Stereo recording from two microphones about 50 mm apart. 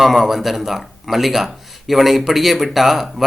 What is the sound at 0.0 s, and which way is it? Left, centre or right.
A man's voice, centre.